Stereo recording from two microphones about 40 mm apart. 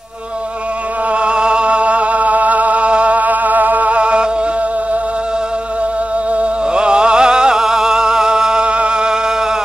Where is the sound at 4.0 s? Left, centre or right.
Right.